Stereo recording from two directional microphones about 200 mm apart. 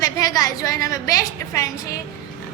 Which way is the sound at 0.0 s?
20° left (ahead or behind).